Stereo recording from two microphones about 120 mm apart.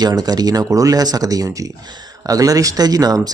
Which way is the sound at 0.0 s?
35° right (ahead or behind).